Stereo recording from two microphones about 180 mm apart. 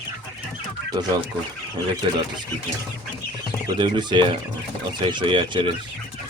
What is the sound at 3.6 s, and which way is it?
Speech, 25° right (ahead or behind).